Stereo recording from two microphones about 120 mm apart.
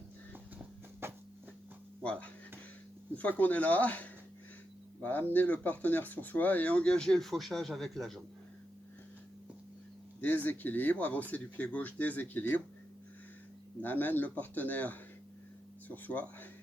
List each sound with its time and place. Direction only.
1.0 s a sound: 20° right (ahead or behind)
2.0 s speech: 10° left (ahead or behind)
10.2 s speech: 15° left (ahead or behind)
13.8 s speech: 15° left (ahead or behind)
16.0 s speech: 15° left (ahead or behind)